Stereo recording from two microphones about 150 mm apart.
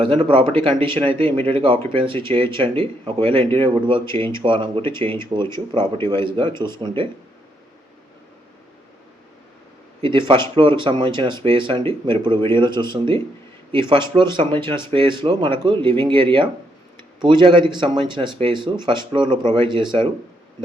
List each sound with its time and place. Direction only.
0.0 s speech: 35° right (ahead or behind)
10.0 s speech: 35° right (ahead or behind)